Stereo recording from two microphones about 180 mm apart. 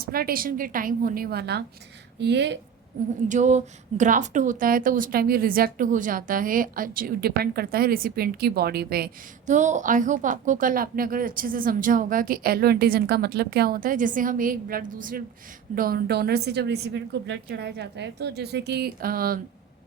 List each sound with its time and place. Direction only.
0.0 s a woman's voice: 55° right (ahead or behind); by 2.6 s 70° right (ahead or behind)
3.2 s a woman's voice: 40° right (ahead or behind); by 9.0 s 60° right (ahead or behind)
9.5 s a woman's voice: 40° right (ahead or behind)